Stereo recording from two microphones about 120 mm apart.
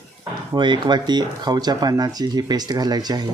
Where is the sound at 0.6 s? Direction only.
40° right (ahead or behind).